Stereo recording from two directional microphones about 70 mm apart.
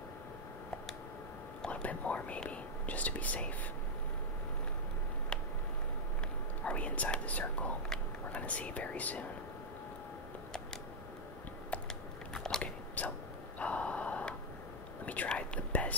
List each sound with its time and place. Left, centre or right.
1.6 s speech: centre
6.6 s speech: centre
7.9 s whispering: centre
12.4 s biting: centre
13.0 s a sound: left
15.2 s whispering: centre